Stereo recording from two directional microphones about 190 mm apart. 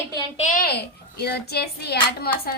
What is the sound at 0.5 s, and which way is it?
A child's voice, 55° left (ahead or behind).